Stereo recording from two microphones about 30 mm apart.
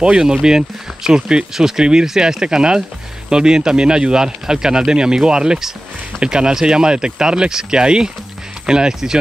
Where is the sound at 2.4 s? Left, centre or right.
Right.